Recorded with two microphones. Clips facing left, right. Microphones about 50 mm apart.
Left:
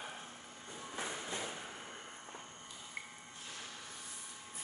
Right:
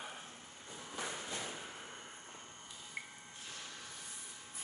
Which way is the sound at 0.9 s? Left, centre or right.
Left.